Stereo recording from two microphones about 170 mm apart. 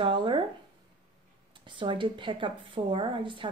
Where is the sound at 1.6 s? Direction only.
30° right (ahead or behind).